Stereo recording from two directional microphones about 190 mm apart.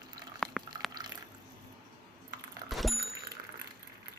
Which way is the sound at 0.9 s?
20° right (ahead or behind).